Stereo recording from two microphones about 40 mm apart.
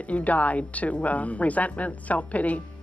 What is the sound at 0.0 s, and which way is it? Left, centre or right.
A woman's voice, left.